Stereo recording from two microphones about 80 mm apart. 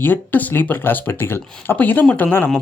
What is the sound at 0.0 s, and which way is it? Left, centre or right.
Speech, left.